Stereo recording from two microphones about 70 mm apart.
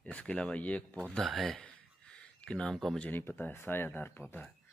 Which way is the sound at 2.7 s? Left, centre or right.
Centre.